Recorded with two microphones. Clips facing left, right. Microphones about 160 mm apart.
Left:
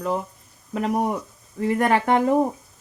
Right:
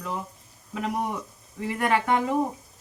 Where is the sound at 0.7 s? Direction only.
45° left (ahead or behind).